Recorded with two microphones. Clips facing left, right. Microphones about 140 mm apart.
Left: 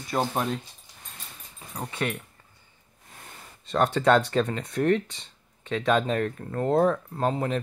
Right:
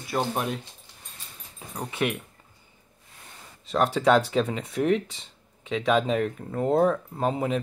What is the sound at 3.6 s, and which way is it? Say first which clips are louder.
Speech: even; centre (ahead or behind).